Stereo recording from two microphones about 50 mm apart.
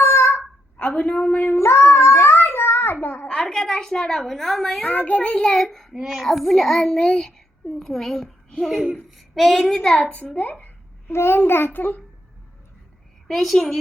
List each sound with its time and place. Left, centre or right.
0.0 s a sound: left
0.8 s a woman's voice: left
1.5 s child singing: left
3.2 s a sound: centre
3.5 s a woman's voice: centre
4.8 s a woman's voice: left
5.2 s a woman's voice: centre
5.5 s a child's voice: centre
5.9 s a woman's voice: centre
9.6 s a child's voice: centre
10.0 s a woman's voice: left
11.1 s a child's voice: left
13.2 s a woman's voice: centre